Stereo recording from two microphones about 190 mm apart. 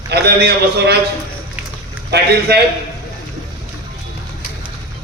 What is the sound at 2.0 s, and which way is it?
Speech, 60° right (ahead or behind).